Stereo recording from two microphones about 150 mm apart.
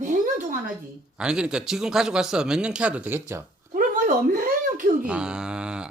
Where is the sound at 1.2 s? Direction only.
5° right (ahead or behind).